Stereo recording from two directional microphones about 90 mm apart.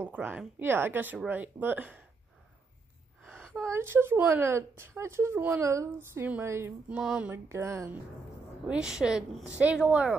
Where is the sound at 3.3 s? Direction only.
5° left (ahead or behind).